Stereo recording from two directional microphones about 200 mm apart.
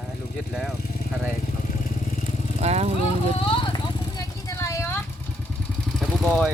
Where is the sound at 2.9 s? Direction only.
25° left (ahead or behind).